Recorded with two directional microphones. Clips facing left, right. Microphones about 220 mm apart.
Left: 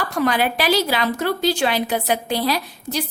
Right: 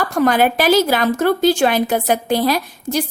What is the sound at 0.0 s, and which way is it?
A woman's voice, 45° right (ahead or behind).